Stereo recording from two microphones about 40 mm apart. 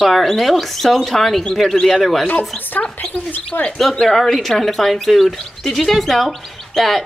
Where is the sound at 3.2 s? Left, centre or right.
Left.